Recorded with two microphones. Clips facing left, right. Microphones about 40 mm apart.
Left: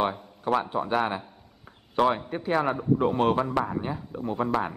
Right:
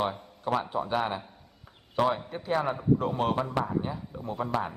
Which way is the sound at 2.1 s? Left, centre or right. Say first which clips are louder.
Left 3 dB; left.